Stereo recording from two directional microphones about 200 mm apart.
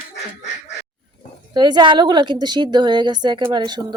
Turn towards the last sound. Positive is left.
turn(degrees=-20)  # may be behind; listen again after turning